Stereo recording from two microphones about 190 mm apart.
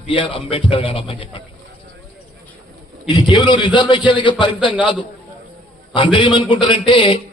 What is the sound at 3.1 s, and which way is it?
A man's voice, 25° left (ahead or behind).